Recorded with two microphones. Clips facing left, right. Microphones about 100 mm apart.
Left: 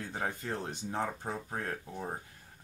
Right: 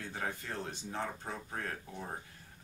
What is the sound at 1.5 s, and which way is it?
Speech, 30° left (ahead or behind).